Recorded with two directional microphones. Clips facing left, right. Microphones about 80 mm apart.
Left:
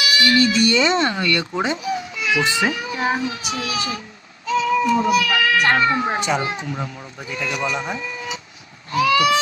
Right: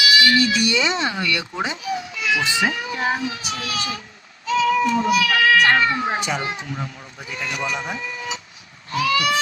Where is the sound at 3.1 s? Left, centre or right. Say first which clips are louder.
Left 2 dB; left.